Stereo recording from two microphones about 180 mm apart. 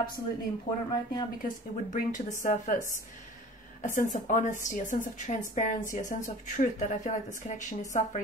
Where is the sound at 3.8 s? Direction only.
45° left (ahead or behind).